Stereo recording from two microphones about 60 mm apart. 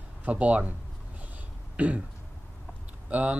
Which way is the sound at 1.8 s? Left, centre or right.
Right.